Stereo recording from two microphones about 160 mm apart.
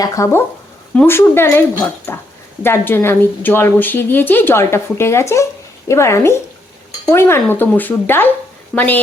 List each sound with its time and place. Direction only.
0.0 s a woman's voice: 20° left (ahead or behind)